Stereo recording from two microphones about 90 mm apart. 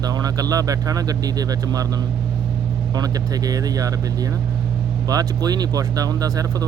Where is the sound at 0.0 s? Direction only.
45° right (ahead or behind).